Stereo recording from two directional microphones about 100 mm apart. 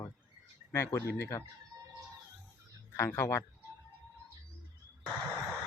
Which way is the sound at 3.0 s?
30° left (ahead or behind).